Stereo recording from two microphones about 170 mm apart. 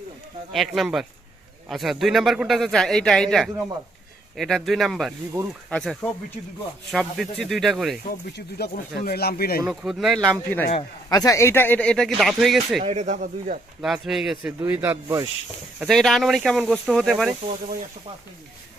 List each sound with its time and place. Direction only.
0.5 s a man's voice: centre (ahead or behind)
8.3 s speech: 75° left (ahead or behind)
9.6 s a man's voice: 5° right (ahead or behind)
11.1 s a man's voice: 20° left (ahead or behind); by 12.8 s centre (ahead or behind)
12.8 s speech: 40° right (ahead or behind)
13.8 s a man's voice: centre (ahead or behind)
14.6 s speech: 15° right (ahead or behind)
15.9 s a man's voice: centre (ahead or behind)